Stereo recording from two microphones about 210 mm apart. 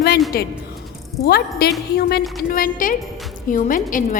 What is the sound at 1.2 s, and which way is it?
Music, 50° left (ahead or behind).